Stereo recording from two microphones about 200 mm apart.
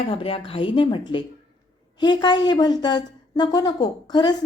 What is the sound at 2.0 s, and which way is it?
Speech, 20° left (ahead or behind).